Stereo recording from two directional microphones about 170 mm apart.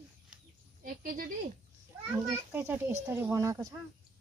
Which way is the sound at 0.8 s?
50° right (ahead or behind).